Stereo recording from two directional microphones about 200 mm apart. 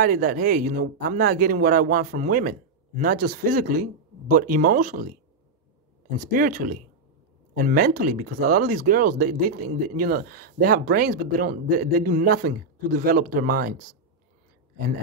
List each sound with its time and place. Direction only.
0.0 s speech: 45° right (ahead or behind)
6.3 s speech: 45° right (ahead or behind)